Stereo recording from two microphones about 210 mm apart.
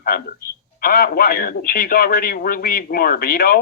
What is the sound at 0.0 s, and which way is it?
Speech, 45° left (ahead or behind).